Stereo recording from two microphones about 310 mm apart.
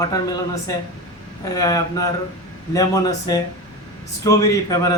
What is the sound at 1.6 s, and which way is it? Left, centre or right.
A woman's voice, centre.